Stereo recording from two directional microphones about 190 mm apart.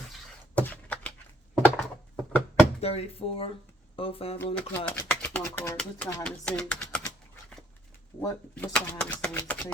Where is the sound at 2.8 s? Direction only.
30° left (ahead or behind).